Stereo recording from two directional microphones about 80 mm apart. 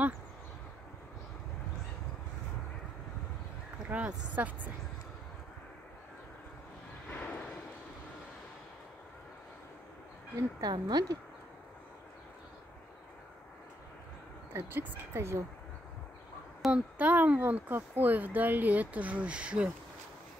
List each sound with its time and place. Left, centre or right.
3.9 s speech: centre
7.1 s a sound: centre
10.6 s speech: right
14.5 s speech: right
16.7 s speech: centre